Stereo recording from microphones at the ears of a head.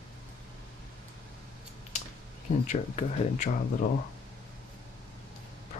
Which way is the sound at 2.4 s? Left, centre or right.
Left.